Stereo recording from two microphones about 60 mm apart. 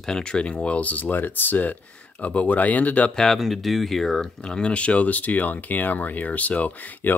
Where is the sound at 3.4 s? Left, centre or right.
Centre.